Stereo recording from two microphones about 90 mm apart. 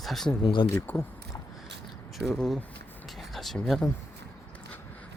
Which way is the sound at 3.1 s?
Centre (ahead or behind).